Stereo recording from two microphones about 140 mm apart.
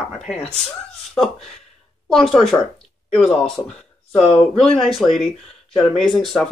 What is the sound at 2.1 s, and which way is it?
Speech, centre (ahead or behind).